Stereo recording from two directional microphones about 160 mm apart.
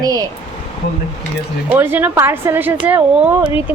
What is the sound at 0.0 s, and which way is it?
Speech, 25° right (ahead or behind).